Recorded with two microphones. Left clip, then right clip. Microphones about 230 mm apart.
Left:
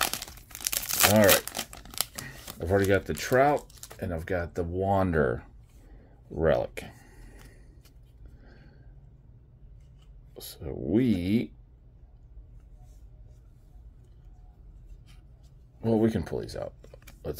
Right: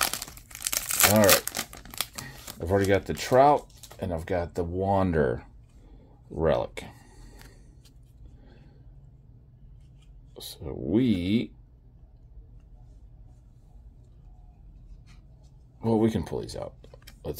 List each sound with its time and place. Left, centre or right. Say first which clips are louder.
0.0 s crumpling: right 1 dB; centre
0.4 s crumpling: right 1 dB; centre
0.8 s crumpling: even; centre
2.2 s speech: even; centre
6.3 s a sound: even; centre
10.3 s speech: right 1 dB; centre
15.8 s speech: right 1 dB; centre